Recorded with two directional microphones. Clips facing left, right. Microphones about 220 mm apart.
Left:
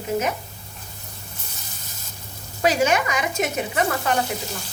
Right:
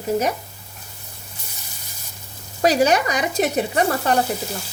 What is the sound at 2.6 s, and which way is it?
Speech, 40° right (ahead or behind).